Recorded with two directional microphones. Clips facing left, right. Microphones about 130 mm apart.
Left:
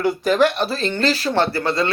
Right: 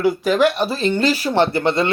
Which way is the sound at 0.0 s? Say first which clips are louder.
Right 1 dB; 5° right (ahead or behind).